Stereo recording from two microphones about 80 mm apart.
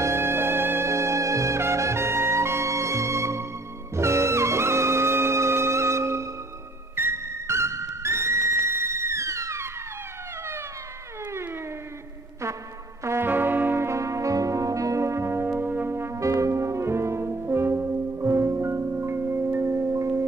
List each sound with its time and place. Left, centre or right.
0.0 s music: right
13.0 s brass instrument: right